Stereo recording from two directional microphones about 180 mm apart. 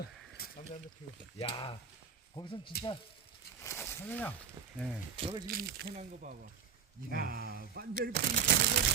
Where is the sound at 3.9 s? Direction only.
10° left (ahead or behind).